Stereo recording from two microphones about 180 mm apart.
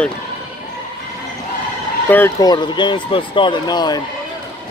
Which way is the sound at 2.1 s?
10° left (ahead or behind).